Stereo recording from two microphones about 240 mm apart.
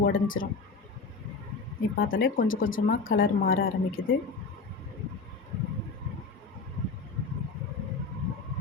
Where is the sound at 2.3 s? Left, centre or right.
Left.